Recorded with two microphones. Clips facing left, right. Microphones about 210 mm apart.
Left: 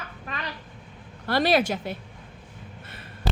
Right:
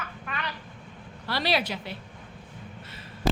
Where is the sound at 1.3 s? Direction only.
50° left (ahead or behind).